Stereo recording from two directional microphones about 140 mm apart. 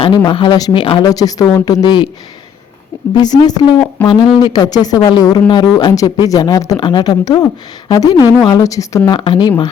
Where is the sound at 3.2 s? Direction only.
30° left (ahead or behind).